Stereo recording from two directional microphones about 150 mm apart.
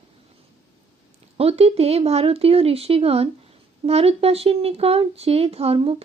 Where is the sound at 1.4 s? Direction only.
40° right (ahead or behind).